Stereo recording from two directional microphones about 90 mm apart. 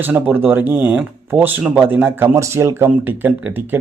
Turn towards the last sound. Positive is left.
turn(degrees=-20)  # may be behind; listen again after turning